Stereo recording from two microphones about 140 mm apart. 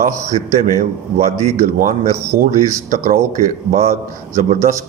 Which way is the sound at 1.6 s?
70° right (ahead or behind).